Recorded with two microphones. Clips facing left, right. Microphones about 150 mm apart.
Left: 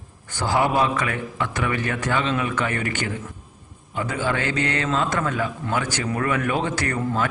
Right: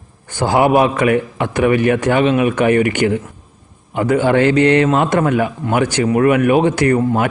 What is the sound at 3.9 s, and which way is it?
Speech, 70° right (ahead or behind).